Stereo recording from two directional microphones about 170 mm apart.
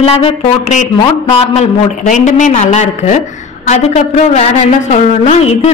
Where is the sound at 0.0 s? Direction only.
35° left (ahead or behind).